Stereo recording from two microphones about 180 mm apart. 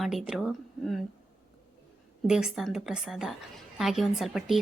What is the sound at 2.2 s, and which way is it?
A woman's voice, 5° right (ahead or behind).